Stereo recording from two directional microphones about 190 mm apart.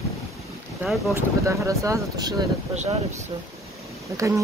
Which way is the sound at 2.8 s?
35° right (ahead or behind).